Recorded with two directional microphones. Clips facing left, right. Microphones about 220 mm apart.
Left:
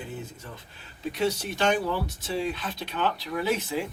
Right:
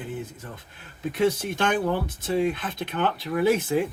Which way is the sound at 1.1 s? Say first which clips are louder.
Right 4 dB; 50° right (ahead or behind).